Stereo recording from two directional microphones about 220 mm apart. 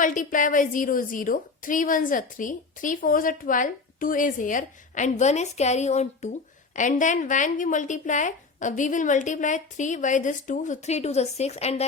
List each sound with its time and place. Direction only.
0.0 s a woman's voice: 35° left (ahead or behind)